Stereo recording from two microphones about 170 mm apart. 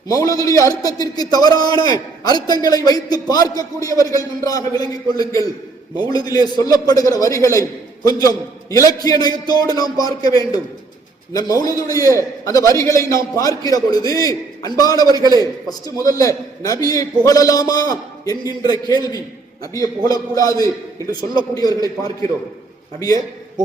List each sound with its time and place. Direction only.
0.1 s a man's voice: 20° left (ahead or behind)
11.3 s a man's voice: 20° left (ahead or behind)
23.0 s a man's voice: 20° left (ahead or behind)